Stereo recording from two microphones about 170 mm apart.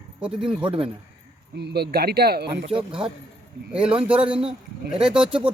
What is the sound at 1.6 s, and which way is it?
Speech, 75° right (ahead or behind).